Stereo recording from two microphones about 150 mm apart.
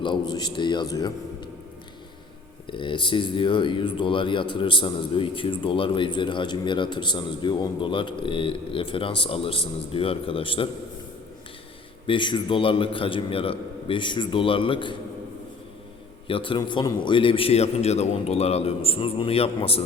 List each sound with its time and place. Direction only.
0.0 s a man's voice: 30° left (ahead or behind)
2.6 s speech: 35° left (ahead or behind)
12.0 s speech: 30° left (ahead or behind)
16.2 s speech: 35° left (ahead or behind)